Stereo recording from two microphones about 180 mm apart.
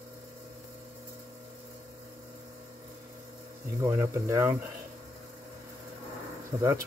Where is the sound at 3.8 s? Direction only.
15° right (ahead or behind).